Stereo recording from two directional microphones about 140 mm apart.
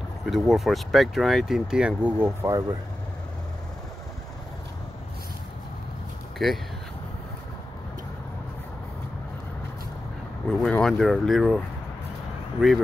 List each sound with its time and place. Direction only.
0.3 s speech: centre (ahead or behind); by 2.6 s 15° right (ahead or behind)
6.3 s speech: centre (ahead or behind)
10.6 s speech: 5° left (ahead or behind)